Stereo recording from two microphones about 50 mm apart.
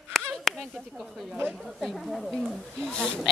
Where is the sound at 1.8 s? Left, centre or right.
Centre.